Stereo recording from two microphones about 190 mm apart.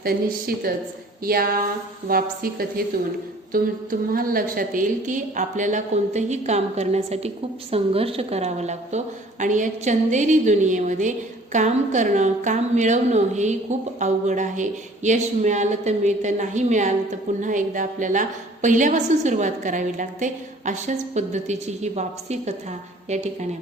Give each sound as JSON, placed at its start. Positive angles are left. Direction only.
{"t": 0.0, "sound": "a woman's voice", "side_deg": -50}